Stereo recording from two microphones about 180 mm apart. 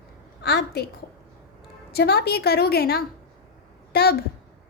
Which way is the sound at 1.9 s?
60° left (ahead or behind).